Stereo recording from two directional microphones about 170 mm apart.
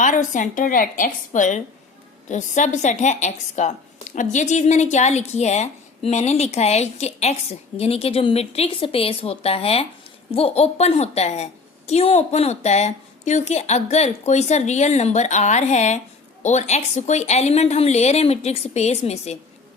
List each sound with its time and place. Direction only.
0.0 s a woman's voice: 50° left (ahead or behind)